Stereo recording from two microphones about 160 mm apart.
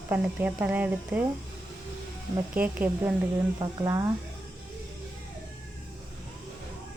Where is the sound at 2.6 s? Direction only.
10° right (ahead or behind).